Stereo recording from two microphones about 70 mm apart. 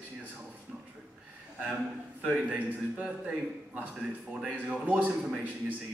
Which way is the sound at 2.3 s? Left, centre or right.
Right.